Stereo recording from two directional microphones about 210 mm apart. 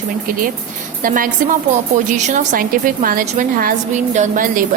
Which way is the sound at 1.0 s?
40° right (ahead or behind).